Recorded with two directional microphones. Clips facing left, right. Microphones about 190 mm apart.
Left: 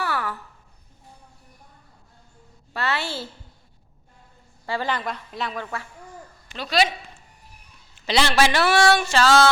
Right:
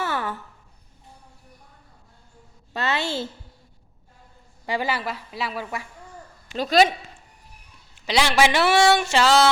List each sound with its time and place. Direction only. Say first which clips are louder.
0.0 s a sound: even; 20° right (ahead or behind)
2.7 s speech: right 2 dB; 20° right (ahead or behind)
4.6 s a woman's voice: right 1 dB; 15° right (ahead or behind)
6.6 s speech: right 4 dB; 45° right (ahead or behind)
8.0 s speech: even; 15° right (ahead or behind)